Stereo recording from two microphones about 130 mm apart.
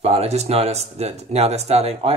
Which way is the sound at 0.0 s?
55° right (ahead or behind).